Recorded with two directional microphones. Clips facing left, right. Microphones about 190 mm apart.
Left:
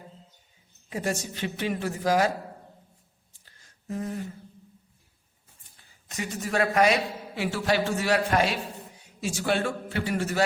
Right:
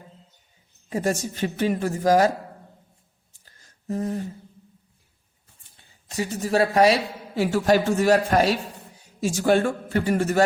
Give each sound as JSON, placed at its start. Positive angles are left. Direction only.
{"t": 0.9, "sound": "a man's voice", "side_deg": -40}
{"t": 3.4, "sound": "a sound", "side_deg": -40}
{"t": 5.7, "sound": "a man's voice", "side_deg": -25}